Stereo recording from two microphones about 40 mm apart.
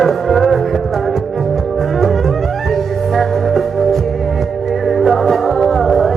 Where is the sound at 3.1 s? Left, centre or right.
Centre.